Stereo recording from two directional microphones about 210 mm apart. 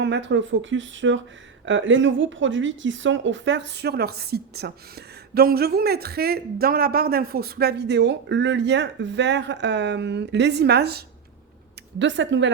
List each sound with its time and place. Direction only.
0.0 s speech: 55° right (ahead or behind)